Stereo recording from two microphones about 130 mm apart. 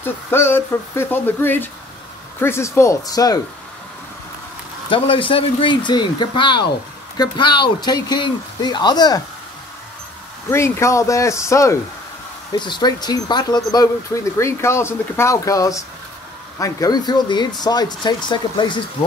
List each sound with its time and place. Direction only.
0.0 s speech: 20° left (ahead or behind)
4.8 s speech: 40° left (ahead or behind)
10.5 s speech: 20° left (ahead or behind)
12.5 s speech: 35° left (ahead or behind)